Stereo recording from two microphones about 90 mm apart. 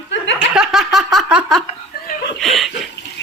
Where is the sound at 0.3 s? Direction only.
10° right (ahead or behind).